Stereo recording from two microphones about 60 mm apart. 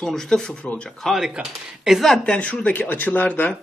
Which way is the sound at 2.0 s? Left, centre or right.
Centre.